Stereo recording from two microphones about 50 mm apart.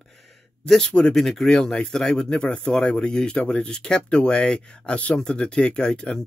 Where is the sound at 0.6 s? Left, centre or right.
Centre.